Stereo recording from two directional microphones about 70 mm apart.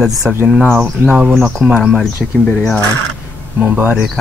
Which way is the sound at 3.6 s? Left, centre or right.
Right.